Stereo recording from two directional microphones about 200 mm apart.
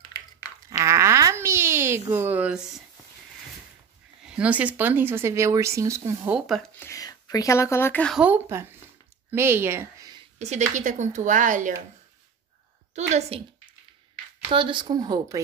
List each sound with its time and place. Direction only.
0.7 s a sound: 15° right (ahead or behind)
4.4 s speech: 5° right (ahead or behind)
6.9 s speech: 20° left (ahead or behind)
8.2 s speech: 10° right (ahead or behind)
10.4 s a woman's voice: 35° right (ahead or behind)
12.9 s a woman's voice: 35° right (ahead or behind)
14.5 s speech: 25° right (ahead or behind)